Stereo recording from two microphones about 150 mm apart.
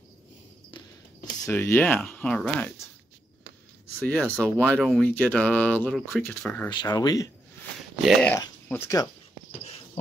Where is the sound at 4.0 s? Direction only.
10° left (ahead or behind).